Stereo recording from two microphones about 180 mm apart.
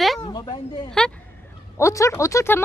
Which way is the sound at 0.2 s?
30° left (ahead or behind).